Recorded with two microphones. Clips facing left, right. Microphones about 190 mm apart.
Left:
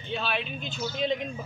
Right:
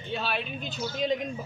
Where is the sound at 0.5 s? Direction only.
40° right (ahead or behind).